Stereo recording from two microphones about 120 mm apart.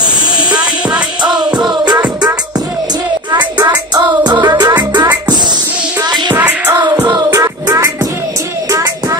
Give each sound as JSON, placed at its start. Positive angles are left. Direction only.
{"t": 1.5, "sound": "music", "side_deg": -10}
{"t": 3.3, "sound": "music", "side_deg": -35}
{"t": 6.3, "sound": "music", "side_deg": -15}
{"t": 6.7, "sound": "music", "side_deg": -30}